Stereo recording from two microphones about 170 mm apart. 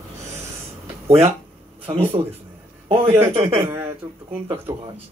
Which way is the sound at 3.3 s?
35° right (ahead or behind).